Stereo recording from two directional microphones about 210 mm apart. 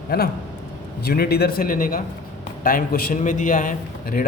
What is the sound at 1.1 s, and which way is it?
A man's voice, 50° left (ahead or behind).